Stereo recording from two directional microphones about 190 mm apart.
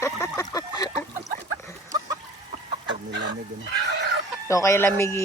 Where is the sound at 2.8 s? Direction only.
65° right (ahead or behind).